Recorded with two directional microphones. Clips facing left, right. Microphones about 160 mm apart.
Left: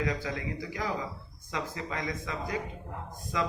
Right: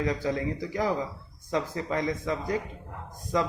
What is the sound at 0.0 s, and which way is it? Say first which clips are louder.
Speech: right 5 dB; 30° right (ahead or behind).